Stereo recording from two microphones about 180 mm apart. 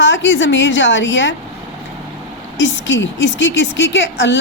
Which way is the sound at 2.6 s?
85° left.